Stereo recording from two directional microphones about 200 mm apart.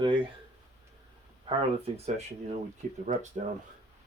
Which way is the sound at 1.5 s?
30° right (ahead or behind).